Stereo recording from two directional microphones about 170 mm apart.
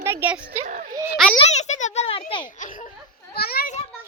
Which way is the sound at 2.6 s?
50° left (ahead or behind).